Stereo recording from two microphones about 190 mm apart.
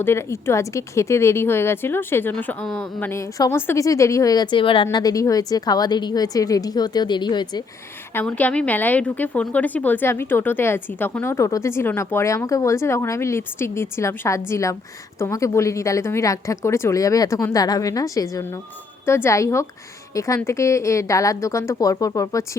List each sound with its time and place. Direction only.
0.0 s a woman's voice: 15° left (ahead or behind)
8.1 s a woman's voice: 10° left (ahead or behind)